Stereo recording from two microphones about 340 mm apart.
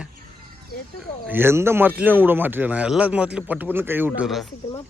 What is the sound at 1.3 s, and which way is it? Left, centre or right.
Speech, centre.